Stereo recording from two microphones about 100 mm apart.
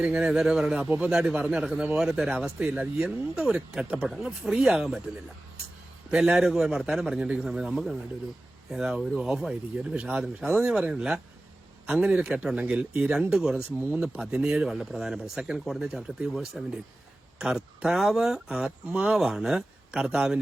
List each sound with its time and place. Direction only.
0.0 s speech: 10° right (ahead or behind)
6.1 s speech: 10° right (ahead or behind)
13.3 s speech: 5° right (ahead or behind)
13.7 s speech: 20° right (ahead or behind)
14.0 s speech: 5° right (ahead or behind)